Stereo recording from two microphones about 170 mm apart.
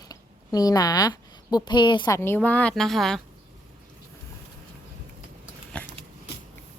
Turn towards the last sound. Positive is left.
turn(degrees=5)  # may be behind; listen again after turning